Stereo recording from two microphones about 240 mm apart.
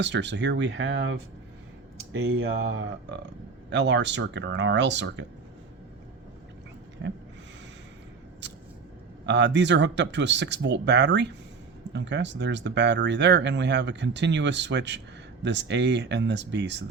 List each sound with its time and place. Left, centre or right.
0.0 s speech: right
7.0 s speech: right
9.2 s speech: right